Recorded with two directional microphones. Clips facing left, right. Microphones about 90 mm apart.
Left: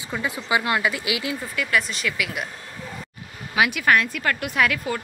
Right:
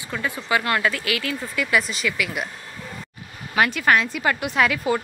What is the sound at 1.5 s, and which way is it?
Speech, centre (ahead or behind).